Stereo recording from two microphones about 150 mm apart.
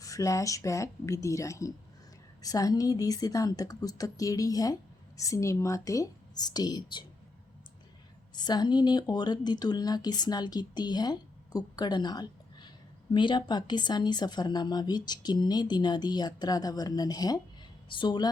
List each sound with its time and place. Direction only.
0.0 s speech: 20° left (ahead or behind)
8.4 s speech: 30° left (ahead or behind)